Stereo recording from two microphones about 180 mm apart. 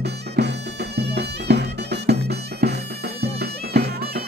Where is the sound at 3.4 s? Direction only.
65° right (ahead or behind).